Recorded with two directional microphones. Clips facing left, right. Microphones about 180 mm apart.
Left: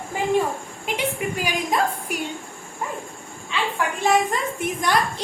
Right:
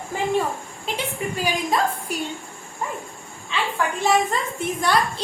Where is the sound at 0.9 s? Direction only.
15° left (ahead or behind).